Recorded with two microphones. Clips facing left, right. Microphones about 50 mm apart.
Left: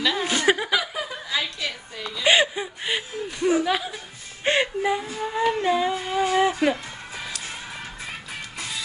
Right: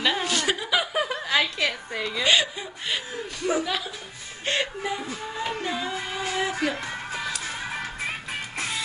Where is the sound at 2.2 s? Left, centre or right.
Left.